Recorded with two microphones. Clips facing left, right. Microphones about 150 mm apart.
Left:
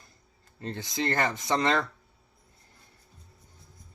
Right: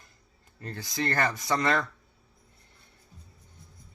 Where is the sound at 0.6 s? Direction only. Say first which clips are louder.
Left 1 dB; 25° left (ahead or behind).